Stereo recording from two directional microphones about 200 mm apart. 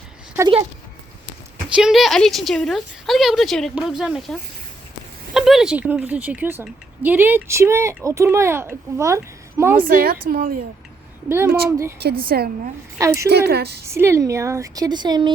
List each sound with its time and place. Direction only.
1.7 s a woman's voice: centre (ahead or behind)
9.8 s a woman's voice: 50° right (ahead or behind)
11.3 s a woman's voice: 10° right (ahead or behind)
11.9 s a woman's voice: 50° right (ahead or behind)
13.8 s a woman's voice: 10° right (ahead or behind)